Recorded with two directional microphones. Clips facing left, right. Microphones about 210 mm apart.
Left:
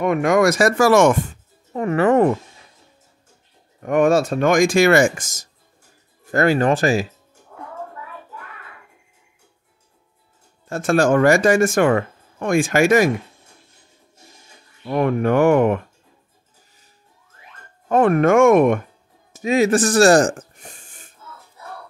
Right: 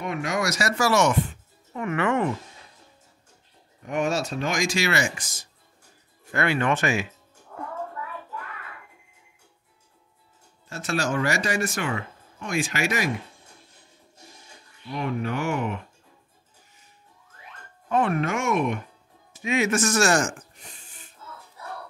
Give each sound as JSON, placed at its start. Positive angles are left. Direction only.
{"t": 0.0, "sound": "speech", "side_deg": 55}
{"t": 3.8, "sound": "speech", "side_deg": 55}
{"t": 10.7, "sound": "speech", "side_deg": 50}
{"t": 14.9, "sound": "speech", "side_deg": 55}
{"t": 17.8, "sound": "speech", "side_deg": 50}
{"t": 19.3, "sound": "speech", "side_deg": 35}
{"t": 20.5, "sound": "a sound", "side_deg": 50}